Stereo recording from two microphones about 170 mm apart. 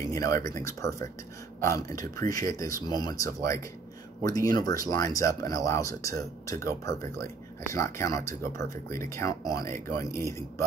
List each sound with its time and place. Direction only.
0.1 s speech: 20° left (ahead or behind)